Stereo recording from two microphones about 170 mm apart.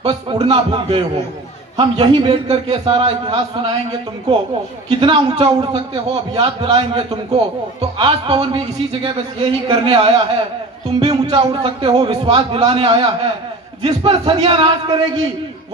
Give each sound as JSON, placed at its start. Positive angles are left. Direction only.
{"t": 0.0, "sound": "a man's voice", "side_deg": -25}
{"t": 2.3, "sound": "a man's voice", "side_deg": -40}
{"t": 4.9, "sound": "a man's voice", "side_deg": -30}
{"t": 7.1, "sound": "a man's voice", "side_deg": -40}
{"t": 7.8, "sound": "a man's voice", "side_deg": -25}